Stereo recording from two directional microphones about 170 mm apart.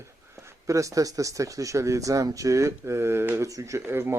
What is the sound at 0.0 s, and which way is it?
Speech, 15° right (ahead or behind).